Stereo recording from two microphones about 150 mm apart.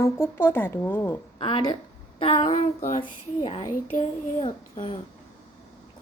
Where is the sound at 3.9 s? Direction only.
55° left (ahead or behind).